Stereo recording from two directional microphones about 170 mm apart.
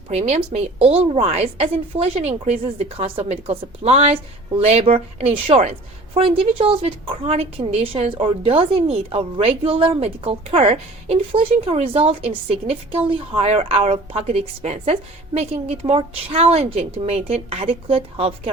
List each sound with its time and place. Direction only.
0.1 s speech: 40° right (ahead or behind)